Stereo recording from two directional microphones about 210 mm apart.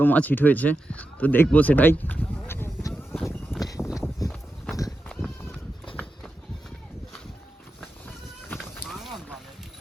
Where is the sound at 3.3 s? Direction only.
Centre (ahead or behind).